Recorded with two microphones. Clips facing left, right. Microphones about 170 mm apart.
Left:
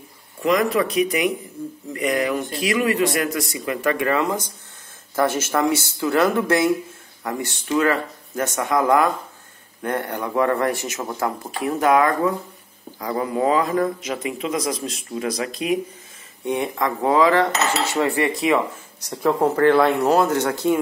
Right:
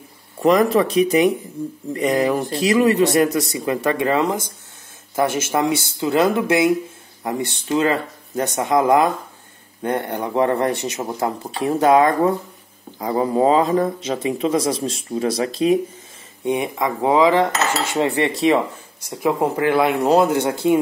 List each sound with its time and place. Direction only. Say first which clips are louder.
0.4 s speech: right 4 dB; 35° right (ahead or behind)
16.4 s speech: right 2 dB; 15° right (ahead or behind)